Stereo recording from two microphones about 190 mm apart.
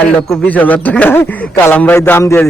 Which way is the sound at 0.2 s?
10° left (ahead or behind).